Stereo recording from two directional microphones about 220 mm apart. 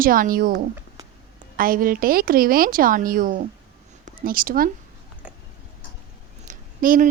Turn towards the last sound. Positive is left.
turn(degrees=-40)  # may be behind; listen again after turning